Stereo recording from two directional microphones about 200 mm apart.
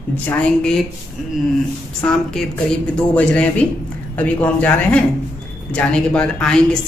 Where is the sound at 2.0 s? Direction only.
5° left (ahead or behind).